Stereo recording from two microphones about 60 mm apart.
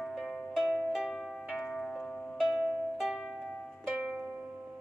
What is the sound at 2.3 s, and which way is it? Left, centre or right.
Music, centre.